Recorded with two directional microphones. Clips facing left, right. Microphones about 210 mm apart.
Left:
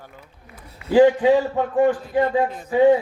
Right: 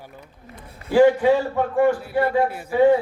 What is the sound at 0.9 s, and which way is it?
Speech, 20° left (ahead or behind).